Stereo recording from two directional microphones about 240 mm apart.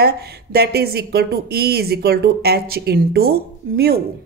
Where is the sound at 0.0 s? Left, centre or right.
Right.